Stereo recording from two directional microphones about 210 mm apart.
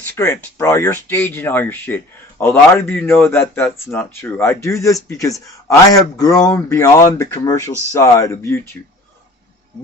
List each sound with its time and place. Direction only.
0.2 s speech: 10° left (ahead or behind)